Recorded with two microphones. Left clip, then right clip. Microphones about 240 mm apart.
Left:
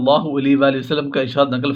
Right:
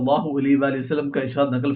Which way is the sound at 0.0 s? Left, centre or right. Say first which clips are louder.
Left 5 dB; left.